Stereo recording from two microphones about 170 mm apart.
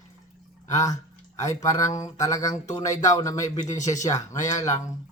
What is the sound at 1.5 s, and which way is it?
Speech, 20° left (ahead or behind).